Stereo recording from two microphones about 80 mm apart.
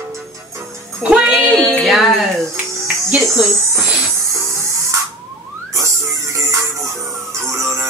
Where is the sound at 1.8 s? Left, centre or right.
Centre.